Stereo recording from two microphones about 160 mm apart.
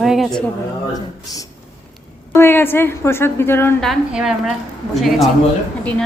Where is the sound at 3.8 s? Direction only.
Centre (ahead or behind).